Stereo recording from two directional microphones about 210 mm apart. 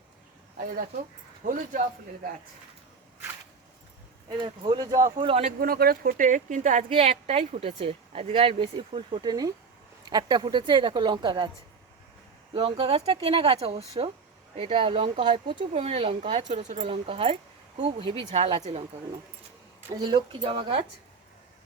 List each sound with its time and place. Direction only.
1.4 s speech: 40° right (ahead or behind)
4.3 s speech: 20° right (ahead or behind)
5.2 s speech: 30° right (ahead or behind)
12.5 s speech: 25° right (ahead or behind)
20.1 s speech: 25° right (ahead or behind)